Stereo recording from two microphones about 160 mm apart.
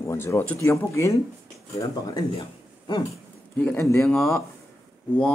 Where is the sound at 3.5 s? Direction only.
10° left (ahead or behind).